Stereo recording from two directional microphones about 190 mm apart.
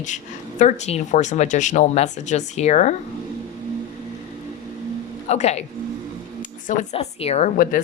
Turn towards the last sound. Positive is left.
turn(degrees=45)  # may be behind; listen again after turning